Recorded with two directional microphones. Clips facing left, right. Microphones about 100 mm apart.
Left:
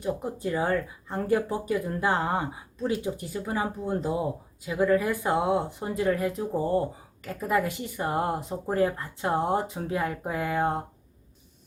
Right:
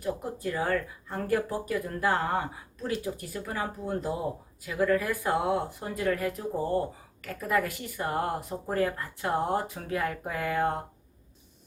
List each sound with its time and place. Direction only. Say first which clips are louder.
0.0 s speech: left 2 dB; 15° left (ahead or behind)